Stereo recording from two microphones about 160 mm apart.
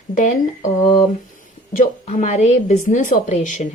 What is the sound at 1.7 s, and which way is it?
Speech, 50° left (ahead or behind).